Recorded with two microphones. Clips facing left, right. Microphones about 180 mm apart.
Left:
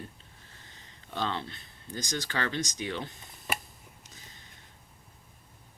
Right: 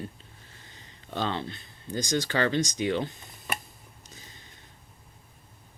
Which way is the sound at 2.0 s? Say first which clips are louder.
Right 7 dB; 20° right (ahead or behind).